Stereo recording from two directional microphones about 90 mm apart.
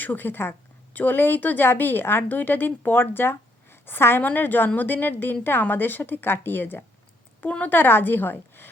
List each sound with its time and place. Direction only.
0.0 s a woman's voice: 20° left (ahead or behind)